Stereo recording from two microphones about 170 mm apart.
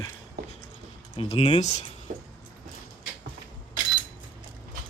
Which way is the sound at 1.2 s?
35° left (ahead or behind).